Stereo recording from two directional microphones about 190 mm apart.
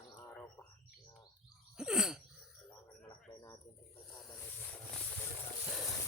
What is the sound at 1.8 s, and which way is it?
Throat clearing, 5° right (ahead or behind).